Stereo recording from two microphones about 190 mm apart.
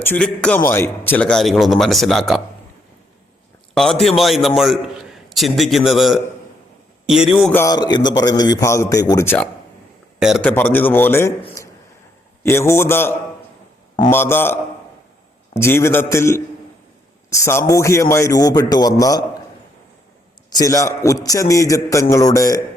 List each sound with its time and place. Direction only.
0.0 s a man's voice: 5° left (ahead or behind)
3.8 s a man's voice: centre (ahead or behind)
7.5 s a man's voice: 15° left (ahead or behind)
10.2 s a man's voice: centre (ahead or behind)
10.5 s a man's voice: 10° left (ahead or behind)
11.6 s a sound: 15° left (ahead or behind)
12.4 s a man's voice: 15° left (ahead or behind)
20.5 s a man's voice: 20° left (ahead or behind)